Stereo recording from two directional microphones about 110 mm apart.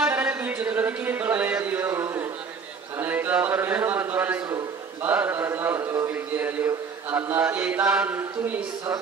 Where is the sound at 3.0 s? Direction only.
20° right (ahead or behind).